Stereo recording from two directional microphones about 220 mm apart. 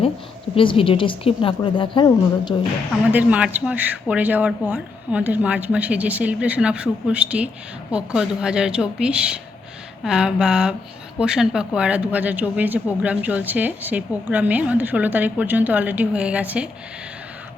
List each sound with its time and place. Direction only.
0.5 s a woman's voice: 25° left (ahead or behind)
3.1 s a woman's voice: 5° right (ahead or behind)